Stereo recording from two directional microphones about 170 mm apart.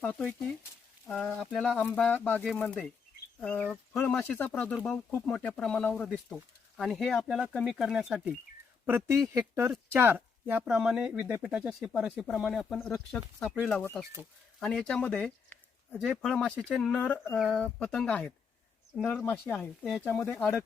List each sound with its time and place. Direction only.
0.0 s speech: 10° left (ahead or behind)